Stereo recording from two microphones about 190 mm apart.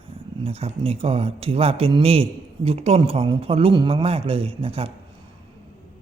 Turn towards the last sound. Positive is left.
turn(degrees=-30)  # may be behind; listen again after turning